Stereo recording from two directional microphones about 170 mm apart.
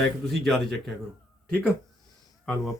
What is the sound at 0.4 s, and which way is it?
Speech, centre (ahead or behind).